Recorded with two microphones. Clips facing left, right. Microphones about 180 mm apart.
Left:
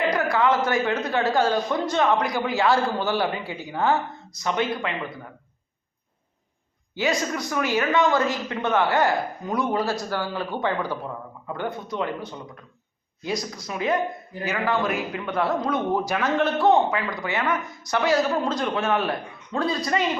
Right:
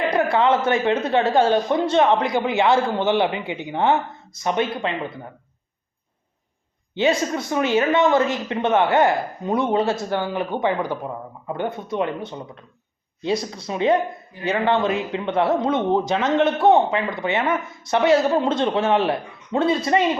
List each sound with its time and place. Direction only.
0.1 s speech: 25° right (ahead or behind)
6.9 s speech: 25° right (ahead or behind)